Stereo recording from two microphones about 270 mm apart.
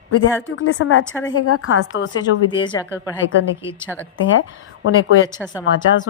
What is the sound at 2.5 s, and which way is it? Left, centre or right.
Speech, centre.